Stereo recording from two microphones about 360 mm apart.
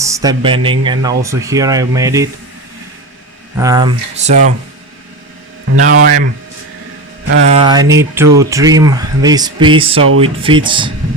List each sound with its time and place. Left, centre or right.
0.0 s speech: centre
3.6 s speech: centre
5.7 s speech: right
7.5 s speech: centre